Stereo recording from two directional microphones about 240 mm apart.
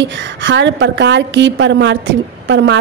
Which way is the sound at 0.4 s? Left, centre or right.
Right.